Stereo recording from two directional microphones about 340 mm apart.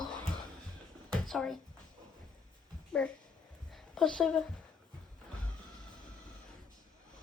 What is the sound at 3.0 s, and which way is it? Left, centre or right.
Speech, centre.